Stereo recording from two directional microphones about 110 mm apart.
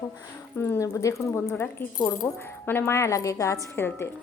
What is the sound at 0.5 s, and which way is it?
Speech, 20° left (ahead or behind).